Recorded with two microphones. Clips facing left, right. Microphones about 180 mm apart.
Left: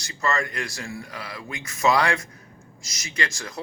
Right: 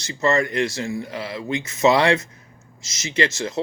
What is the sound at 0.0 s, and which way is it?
Speech, 20° right (ahead or behind).